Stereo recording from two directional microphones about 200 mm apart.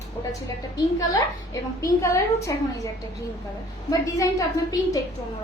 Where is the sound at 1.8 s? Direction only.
15° left (ahead or behind).